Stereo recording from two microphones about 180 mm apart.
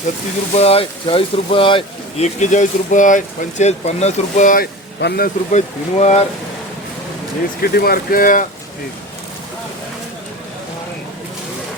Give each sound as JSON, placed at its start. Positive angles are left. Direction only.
{"t": 0.5, "sound": "speech", "side_deg": 35}
{"t": 4.9, "sound": "speech", "side_deg": 60}
{"t": 7.6, "sound": "speech", "side_deg": 55}